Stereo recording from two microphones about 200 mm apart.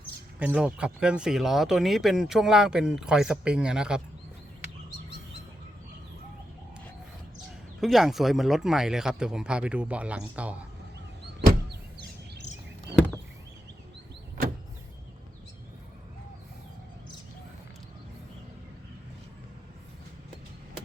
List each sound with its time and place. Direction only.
0.3 s speech: 5° right (ahead or behind)
7.8 s speech: centre (ahead or behind)
11.3 s vehicle: 55° right (ahead or behind)